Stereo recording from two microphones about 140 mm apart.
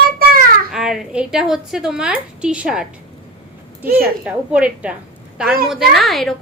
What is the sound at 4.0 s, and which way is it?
A woman's voice, 10° right (ahead or behind).